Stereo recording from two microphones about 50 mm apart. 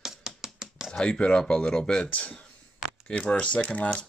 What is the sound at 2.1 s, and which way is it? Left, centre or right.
Speech, left.